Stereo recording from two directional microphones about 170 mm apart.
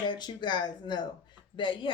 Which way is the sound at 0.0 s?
25° left (ahead or behind).